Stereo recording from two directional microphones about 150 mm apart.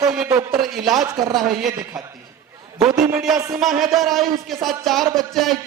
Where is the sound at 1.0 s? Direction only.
25° right (ahead or behind).